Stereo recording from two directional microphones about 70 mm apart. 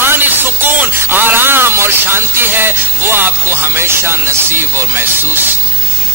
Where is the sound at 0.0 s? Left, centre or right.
Right.